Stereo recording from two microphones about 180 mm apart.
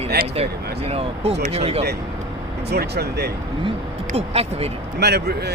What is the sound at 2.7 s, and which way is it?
Speech, 65° right (ahead or behind).